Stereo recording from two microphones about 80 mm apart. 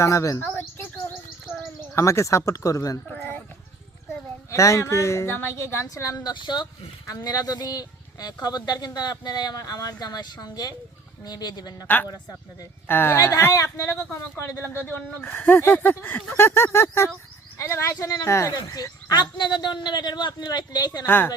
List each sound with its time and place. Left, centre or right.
0.0 s speech: left
0.4 s bird: left
2.0 s speech: left
4.5 s speech: left
6.2 s speech: left
7.1 s speech: left
12.9 s speech: left
18.5 s speech: left
21.1 s a woman's voice: left